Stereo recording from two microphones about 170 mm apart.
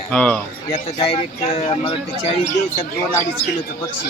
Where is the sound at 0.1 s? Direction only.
5° left (ahead or behind).